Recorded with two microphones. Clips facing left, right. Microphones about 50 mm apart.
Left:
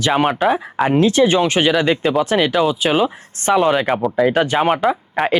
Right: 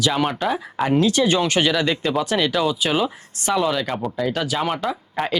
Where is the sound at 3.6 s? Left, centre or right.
Left.